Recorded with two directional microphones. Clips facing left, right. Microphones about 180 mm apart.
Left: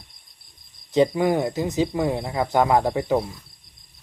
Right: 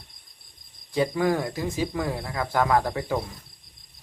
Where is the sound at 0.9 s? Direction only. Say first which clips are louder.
Left 4 dB; 20° left (ahead or behind).